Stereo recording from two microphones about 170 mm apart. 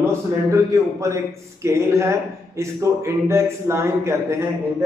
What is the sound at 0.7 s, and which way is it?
A man's voice, 20° right (ahead or behind).